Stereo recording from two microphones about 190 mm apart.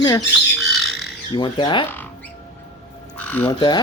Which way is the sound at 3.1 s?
10° left (ahead or behind).